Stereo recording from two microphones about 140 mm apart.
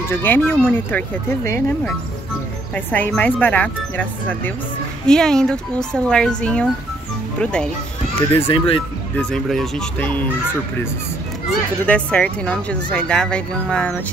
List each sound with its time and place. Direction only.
0.1 s speech: 15° left (ahead or behind)
2.7 s speech: 10° left (ahead or behind)
8.5 s speech: 40° left (ahead or behind)
9.1 s speech: 5° left (ahead or behind)
11.8 s speech: 10° left (ahead or behind)